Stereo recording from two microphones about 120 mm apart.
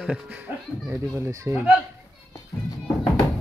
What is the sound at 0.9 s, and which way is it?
Speech, 25° right (ahead or behind).